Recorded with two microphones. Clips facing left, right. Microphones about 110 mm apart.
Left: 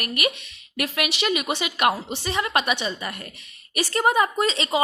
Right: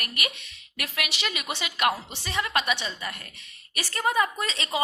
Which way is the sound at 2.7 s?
60° left (ahead or behind).